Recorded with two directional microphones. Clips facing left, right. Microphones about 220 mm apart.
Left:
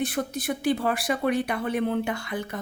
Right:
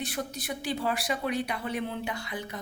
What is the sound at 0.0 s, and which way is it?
A woman's voice, 50° left (ahead or behind).